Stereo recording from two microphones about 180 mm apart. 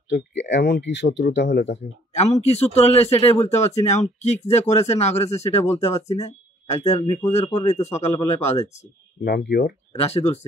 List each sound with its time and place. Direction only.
0.1 s speech: 75° left (ahead or behind)
1.7 s speech: 35° left (ahead or behind)
9.2 s speech: 65° left (ahead or behind)
9.9 s speech: 35° left (ahead or behind)